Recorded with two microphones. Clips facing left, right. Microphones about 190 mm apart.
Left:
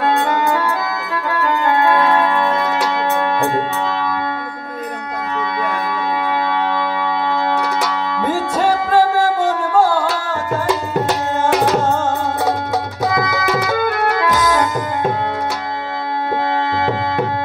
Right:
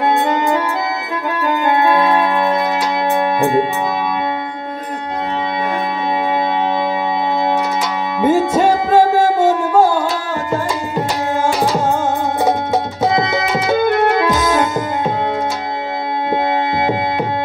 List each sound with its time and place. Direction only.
0.0 s music: 20° right (ahead or behind)
7.5 s music: 20° right (ahead or behind)
12.4 s music: 20° right (ahead or behind)